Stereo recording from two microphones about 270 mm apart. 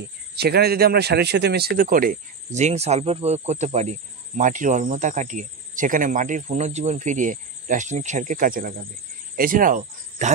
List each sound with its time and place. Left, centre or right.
0.4 s speech: right